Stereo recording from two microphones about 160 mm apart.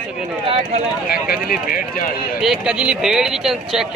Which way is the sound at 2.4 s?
5° right (ahead or behind).